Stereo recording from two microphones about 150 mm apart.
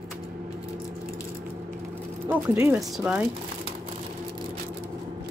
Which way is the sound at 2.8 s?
5° right (ahead or behind).